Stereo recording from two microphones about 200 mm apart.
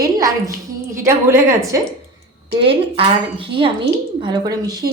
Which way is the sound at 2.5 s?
25° right (ahead or behind).